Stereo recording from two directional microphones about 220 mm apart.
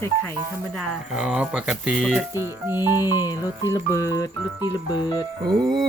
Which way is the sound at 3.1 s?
15° left (ahead or behind).